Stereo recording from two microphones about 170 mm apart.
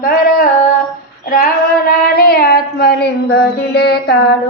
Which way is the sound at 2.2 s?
60° left (ahead or behind).